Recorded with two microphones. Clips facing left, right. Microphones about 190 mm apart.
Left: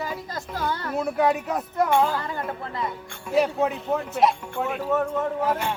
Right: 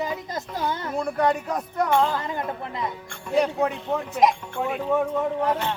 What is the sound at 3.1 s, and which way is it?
Speech, 5° left (ahead or behind).